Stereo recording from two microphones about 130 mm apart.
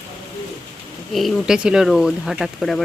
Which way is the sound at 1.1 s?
Centre (ahead or behind).